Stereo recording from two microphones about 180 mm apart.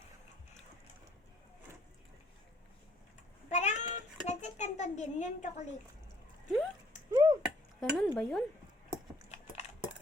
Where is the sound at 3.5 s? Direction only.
40° left (ahead or behind).